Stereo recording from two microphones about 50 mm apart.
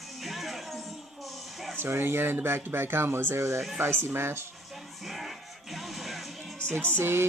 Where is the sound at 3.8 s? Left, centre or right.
Right.